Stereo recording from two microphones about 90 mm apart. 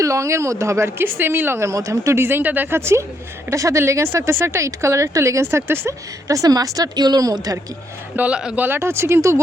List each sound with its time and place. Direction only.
0.0 s speech: 35° right (ahead or behind)
8.1 s speech: 15° right (ahead or behind); by 9.4 s 30° right (ahead or behind)